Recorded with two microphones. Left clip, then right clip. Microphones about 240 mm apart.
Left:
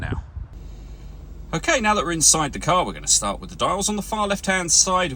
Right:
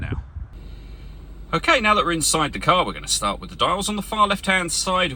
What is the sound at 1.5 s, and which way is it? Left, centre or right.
Speech, centre.